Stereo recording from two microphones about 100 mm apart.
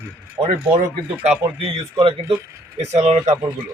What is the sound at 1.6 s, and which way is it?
Speech, 60° right (ahead or behind).